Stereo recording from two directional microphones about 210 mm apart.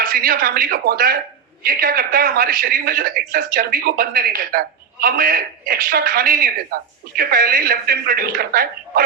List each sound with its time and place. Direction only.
0.0 s speech: 45° right (ahead or behind)